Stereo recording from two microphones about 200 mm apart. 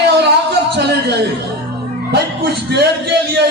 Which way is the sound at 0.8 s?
55° right (ahead or behind).